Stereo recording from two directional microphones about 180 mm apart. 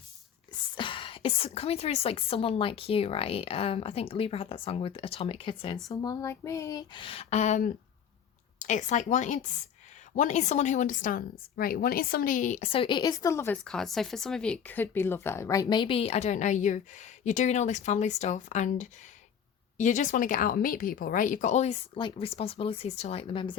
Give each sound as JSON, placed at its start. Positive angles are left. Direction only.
{"t": 0.8, "sound": "a woman's voice", "side_deg": 30}
{"t": 13.7, "sound": "a woman's voice", "side_deg": 0}